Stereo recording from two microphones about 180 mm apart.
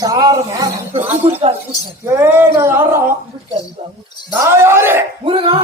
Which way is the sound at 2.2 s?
15° right (ahead or behind).